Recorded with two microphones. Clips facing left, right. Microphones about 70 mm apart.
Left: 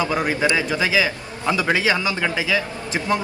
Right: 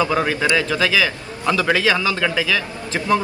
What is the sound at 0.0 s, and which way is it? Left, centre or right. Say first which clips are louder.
A man's voice: right 2 dB; centre.